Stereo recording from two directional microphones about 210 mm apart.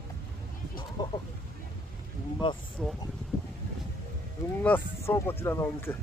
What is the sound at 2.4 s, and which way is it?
Speech, 25° left (ahead or behind).